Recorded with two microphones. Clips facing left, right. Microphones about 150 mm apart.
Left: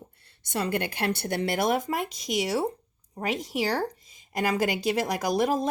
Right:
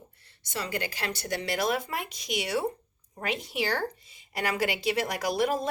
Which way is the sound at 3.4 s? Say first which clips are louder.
Left 3 dB; 40° left (ahead or behind).